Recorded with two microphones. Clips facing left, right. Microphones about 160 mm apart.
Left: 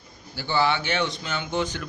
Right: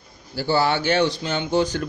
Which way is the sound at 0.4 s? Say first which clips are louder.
Right 3 dB; 40° right (ahead or behind).